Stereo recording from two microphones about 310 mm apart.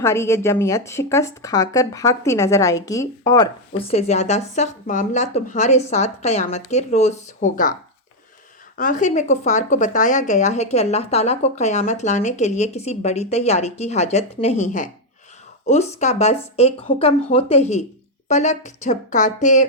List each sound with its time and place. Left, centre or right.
0.0 s speech: centre; by 7.8 s left
8.8 s a woman's voice: left